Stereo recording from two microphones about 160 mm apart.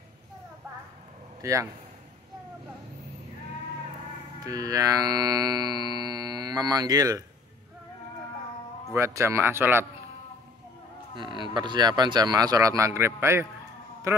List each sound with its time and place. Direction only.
1.4 s speech: 20° right (ahead or behind)
4.5 s music: 20° right (ahead or behind)
8.9 s speech: 15° right (ahead or behind)
11.1 s speech: 30° right (ahead or behind)